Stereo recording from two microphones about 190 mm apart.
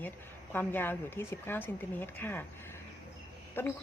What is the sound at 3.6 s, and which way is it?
Speech, 10° left (ahead or behind).